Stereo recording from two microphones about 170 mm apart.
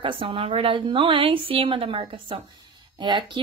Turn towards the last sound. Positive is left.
turn(degrees=-25)  # may be behind; listen again after turning